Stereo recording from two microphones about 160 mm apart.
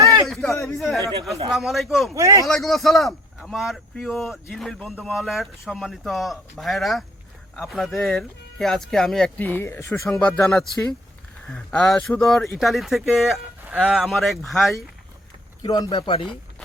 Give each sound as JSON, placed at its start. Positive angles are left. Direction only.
{"t": 0.0, "sound": "a sound", "side_deg": -25}
{"t": 0.3, "sound": "a sound", "side_deg": 5}
{"t": 0.6, "sound": "speech", "side_deg": 0}
{"t": 2.1, "sound": "speech", "side_deg": -20}
{"t": 2.5, "sound": "speech", "side_deg": 0}
{"t": 11.4, "sound": "speech", "side_deg": 5}
{"t": 15.6, "sound": "speech", "side_deg": 25}